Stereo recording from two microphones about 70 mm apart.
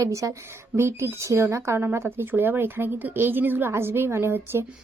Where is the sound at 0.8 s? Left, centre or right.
Right.